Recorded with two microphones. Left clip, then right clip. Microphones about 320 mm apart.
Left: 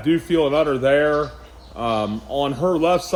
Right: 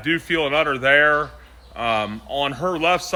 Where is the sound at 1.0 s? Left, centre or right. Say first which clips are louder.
Right 2 dB; centre.